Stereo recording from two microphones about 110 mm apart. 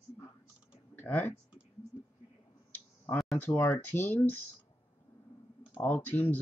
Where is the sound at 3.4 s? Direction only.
15° left (ahead or behind).